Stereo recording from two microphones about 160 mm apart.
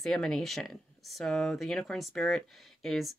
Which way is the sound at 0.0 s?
Centre (ahead or behind).